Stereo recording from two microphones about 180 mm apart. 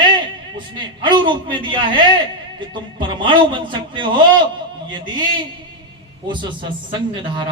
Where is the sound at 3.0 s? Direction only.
25° right (ahead or behind).